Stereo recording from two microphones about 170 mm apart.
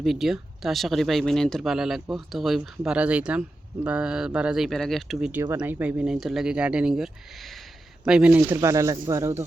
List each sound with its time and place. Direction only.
0.0 s speech: centre (ahead or behind)
5.3 s speech: 10° right (ahead or behind)